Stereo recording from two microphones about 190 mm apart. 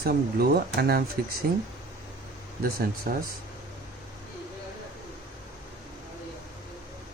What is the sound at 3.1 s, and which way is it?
Speech, 55° right (ahead or behind).